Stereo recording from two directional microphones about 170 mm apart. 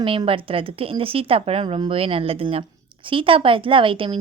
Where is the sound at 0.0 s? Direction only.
30° right (ahead or behind).